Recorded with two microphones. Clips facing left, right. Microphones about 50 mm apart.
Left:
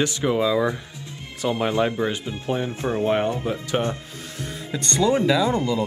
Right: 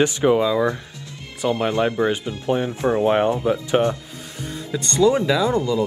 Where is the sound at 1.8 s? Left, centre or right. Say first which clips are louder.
Right 3 dB; right.